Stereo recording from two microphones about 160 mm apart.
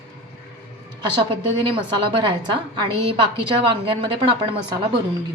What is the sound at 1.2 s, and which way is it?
Speech, 35° right (ahead or behind).